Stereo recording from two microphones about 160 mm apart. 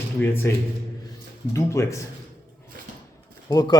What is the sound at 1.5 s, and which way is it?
Speech, 20° left (ahead or behind).